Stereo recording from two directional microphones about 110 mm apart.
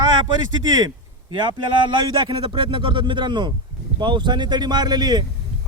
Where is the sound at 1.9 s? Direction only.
45° right (ahead or behind).